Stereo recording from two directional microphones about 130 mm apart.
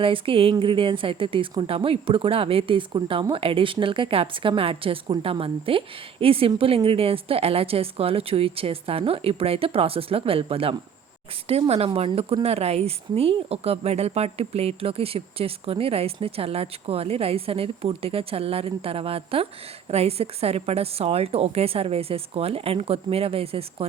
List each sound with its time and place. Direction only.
0.0 s speech: 45° right (ahead or behind)